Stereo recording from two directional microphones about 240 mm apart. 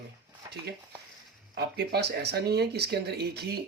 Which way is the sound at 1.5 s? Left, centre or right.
Right.